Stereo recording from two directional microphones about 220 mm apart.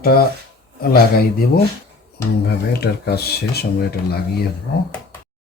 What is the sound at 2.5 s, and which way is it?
Speech, 45° left (ahead or behind).